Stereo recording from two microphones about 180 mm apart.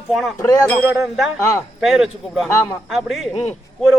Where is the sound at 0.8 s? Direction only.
Centre (ahead or behind).